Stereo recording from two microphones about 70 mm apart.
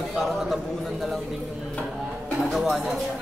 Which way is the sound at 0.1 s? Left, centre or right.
Centre.